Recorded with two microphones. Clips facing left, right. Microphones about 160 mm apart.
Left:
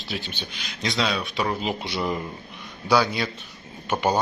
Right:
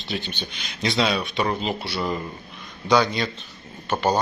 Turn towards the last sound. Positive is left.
turn(degrees=10)  # may be behind; listen again after turning